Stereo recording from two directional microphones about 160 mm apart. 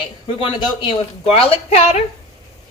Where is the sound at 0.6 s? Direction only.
30° left (ahead or behind).